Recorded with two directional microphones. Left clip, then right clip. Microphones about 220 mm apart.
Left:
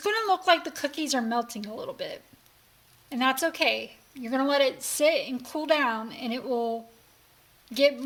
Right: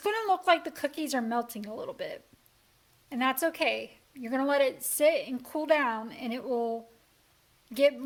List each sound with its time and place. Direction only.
0.0 s a woman's voice: 5° left (ahead or behind)